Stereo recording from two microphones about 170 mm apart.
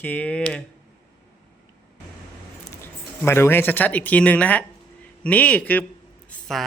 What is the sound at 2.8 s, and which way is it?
Speech, 15° left (ahead or behind).